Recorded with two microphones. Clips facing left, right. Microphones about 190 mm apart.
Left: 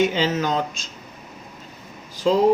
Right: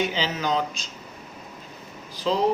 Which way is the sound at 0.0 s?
50° left (ahead or behind).